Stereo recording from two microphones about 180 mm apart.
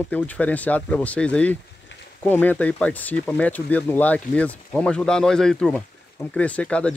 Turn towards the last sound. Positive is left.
turn(degrees=5)  # may be behind; listen again after turning